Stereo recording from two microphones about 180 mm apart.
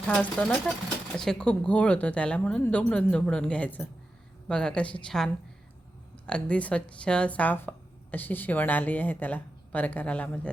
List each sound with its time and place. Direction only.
0.1 s a woman's voice: 5° left (ahead or behind)